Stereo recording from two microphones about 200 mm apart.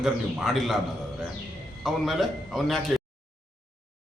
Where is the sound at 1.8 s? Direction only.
Centre (ahead or behind).